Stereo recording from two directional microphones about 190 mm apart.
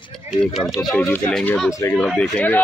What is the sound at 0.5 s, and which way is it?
A man's voice, centre (ahead or behind).